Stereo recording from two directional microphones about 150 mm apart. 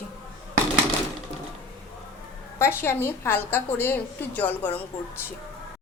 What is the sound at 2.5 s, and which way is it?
A woman's voice, 15° left (ahead or behind).